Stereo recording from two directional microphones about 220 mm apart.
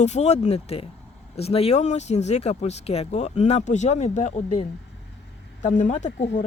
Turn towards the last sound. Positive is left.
turn(degrees=30)  # may be behind; listen again after turning